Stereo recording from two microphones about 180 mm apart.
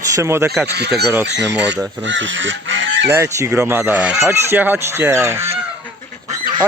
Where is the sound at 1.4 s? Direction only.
75° right (ahead or behind).